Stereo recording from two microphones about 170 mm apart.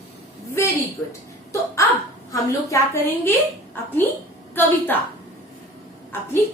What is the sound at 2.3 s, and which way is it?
A woman's voice, 15° left (ahead or behind).